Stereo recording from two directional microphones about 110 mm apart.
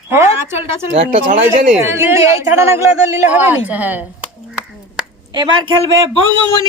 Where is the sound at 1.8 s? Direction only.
25° right (ahead or behind).